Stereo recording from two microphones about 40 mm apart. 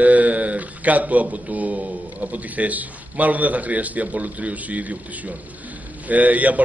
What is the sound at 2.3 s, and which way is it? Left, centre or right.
A man's voice, right.